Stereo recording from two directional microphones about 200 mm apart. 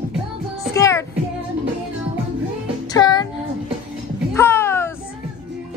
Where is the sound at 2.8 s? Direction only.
20° left (ahead or behind).